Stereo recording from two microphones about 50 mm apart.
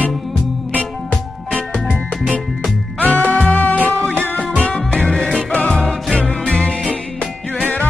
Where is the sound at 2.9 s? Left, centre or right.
Left.